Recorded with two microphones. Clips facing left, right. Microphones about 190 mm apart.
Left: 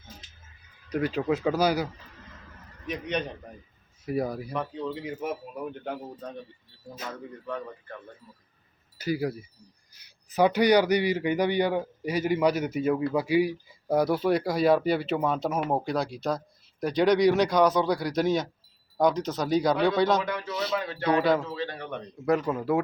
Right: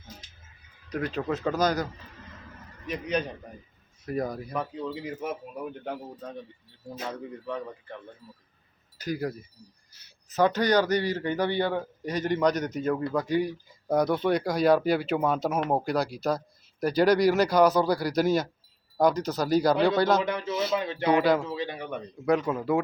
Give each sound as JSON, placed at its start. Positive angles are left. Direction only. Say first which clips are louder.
{"t": 0.9, "sound": "speech", "louder": "left 3 dB", "side_deg": 5}
{"t": 4.5, "sound": "speech", "louder": "even", "side_deg": 0}
{"t": 9.0, "sound": "speech", "louder": "left 2 dB", "side_deg": 10}
{"t": 20.2, "sound": "speech", "louder": "right 2 dB", "side_deg": -20}
{"t": 20.5, "sound": "speech", "louder": "right 3 dB", "side_deg": 0}
{"t": 20.7, "sound": "speech", "louder": "right 1 dB", "side_deg": -20}
{"t": 22.3, "sound": "speech", "louder": "even", "side_deg": 0}